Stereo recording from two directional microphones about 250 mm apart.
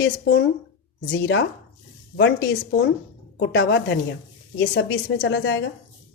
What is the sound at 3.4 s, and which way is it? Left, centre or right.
Speech, left.